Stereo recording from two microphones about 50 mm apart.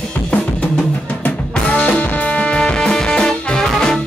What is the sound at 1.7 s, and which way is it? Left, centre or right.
Music, left.